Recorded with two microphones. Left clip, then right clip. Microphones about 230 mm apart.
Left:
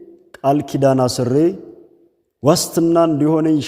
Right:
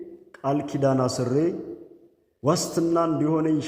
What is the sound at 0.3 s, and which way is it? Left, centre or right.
A man's voice, left.